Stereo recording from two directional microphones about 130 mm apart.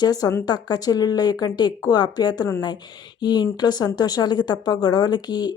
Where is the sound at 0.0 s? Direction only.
30° left (ahead or behind).